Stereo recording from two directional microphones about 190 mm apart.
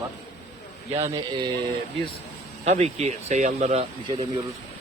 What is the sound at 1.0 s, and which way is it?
Speech, 20° right (ahead or behind).